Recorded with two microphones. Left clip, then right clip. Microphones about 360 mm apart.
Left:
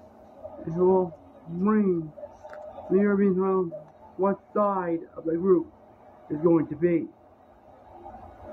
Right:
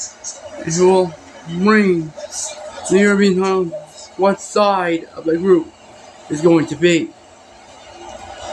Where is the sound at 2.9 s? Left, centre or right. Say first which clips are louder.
Right 10 dB; left.